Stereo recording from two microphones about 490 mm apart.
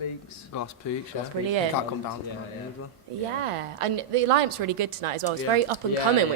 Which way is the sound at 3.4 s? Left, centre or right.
Right.